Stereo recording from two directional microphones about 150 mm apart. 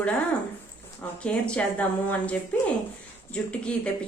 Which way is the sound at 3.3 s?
10° left (ahead or behind).